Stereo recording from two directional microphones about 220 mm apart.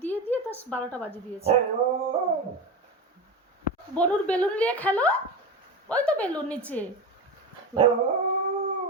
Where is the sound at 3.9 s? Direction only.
5° left (ahead or behind).